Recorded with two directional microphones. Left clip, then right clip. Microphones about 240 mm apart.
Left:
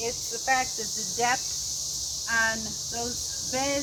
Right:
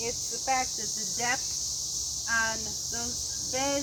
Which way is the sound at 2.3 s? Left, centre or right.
Centre.